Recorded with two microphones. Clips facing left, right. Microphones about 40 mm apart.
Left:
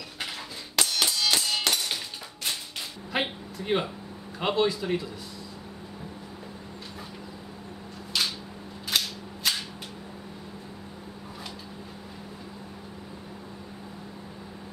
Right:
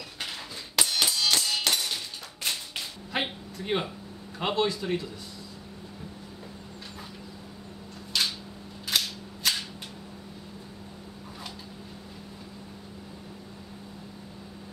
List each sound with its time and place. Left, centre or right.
0.2 s hammer: centre
0.8 s music: centre
3.1 s speech: centre
8.1 s a sound: centre
8.8 s cap gun: centre